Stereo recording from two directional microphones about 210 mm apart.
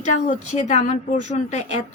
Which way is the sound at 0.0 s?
35° left (ahead or behind).